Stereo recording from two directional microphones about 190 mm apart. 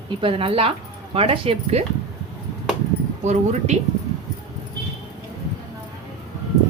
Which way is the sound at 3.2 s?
40° right (ahead or behind).